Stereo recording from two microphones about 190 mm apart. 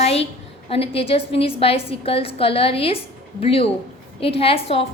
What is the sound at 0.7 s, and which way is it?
A woman's voice, 30° left (ahead or behind).